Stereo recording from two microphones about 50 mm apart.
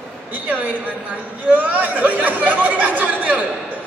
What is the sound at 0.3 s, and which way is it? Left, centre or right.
A man's voice, right.